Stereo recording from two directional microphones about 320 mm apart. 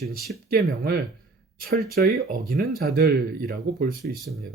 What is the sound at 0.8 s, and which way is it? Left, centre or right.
Speech, right.